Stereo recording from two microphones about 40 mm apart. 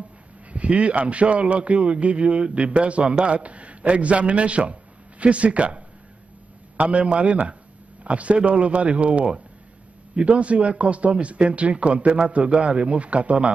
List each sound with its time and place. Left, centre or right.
0.5 s a man's voice: right
6.8 s a man's voice: right